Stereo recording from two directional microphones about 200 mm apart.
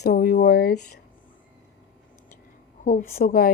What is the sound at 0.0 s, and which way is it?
Speech, 50° left (ahead or behind).